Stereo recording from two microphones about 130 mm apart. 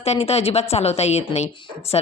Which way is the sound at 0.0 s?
50° left (ahead or behind).